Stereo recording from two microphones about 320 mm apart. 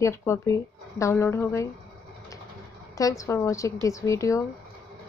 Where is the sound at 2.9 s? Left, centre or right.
Centre.